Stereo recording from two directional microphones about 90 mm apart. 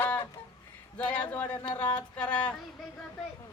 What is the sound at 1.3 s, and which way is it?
Speech, 20° left (ahead or behind).